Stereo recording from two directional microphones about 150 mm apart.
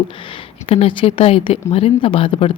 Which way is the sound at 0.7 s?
35° left (ahead or behind).